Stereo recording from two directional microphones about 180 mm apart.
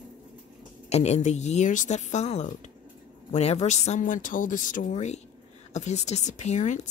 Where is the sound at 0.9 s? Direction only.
40° left (ahead or behind).